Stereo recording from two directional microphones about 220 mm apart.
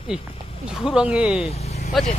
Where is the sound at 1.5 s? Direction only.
30° left (ahead or behind).